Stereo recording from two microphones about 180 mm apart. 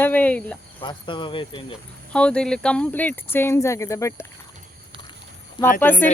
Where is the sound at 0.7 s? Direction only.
25° left (ahead or behind).